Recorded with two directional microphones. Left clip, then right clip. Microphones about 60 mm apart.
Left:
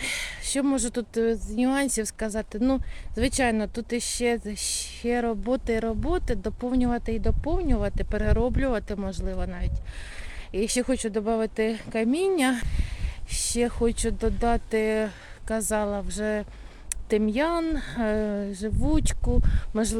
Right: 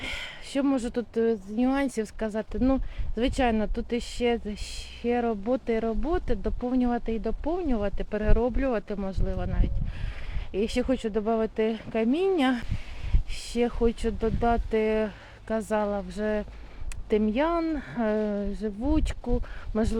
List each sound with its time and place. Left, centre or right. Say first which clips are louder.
0.0 s speech: left 4 dB; left